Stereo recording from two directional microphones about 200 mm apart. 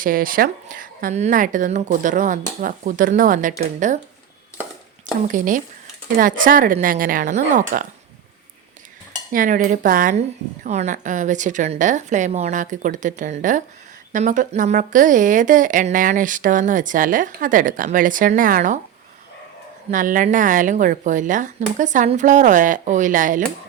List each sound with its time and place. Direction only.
0.0 s a woman's voice: 45° right (ahead or behind)
5.3 s a woman's voice: 40° right (ahead or behind)
9.3 s a woman's voice: 40° right (ahead or behind)
19.9 s a woman's voice: 40° right (ahead or behind)